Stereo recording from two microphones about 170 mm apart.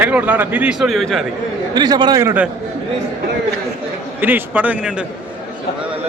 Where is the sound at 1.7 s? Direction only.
25° right (ahead or behind).